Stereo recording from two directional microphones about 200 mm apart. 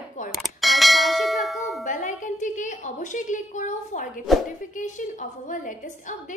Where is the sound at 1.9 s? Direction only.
40° left (ahead or behind).